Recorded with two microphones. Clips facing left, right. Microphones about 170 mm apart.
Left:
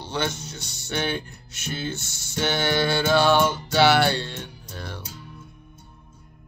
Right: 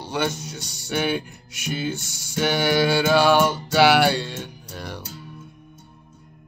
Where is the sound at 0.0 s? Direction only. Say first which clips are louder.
Right 3 dB; 10° right (ahead or behind).